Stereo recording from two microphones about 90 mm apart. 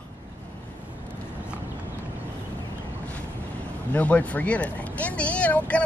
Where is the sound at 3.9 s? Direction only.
15° left (ahead or behind).